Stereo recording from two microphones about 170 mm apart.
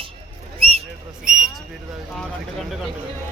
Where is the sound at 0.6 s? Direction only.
35° right (ahead or behind).